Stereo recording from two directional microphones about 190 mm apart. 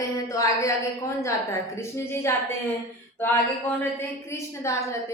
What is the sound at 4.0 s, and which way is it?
Speech, 15° left (ahead or behind).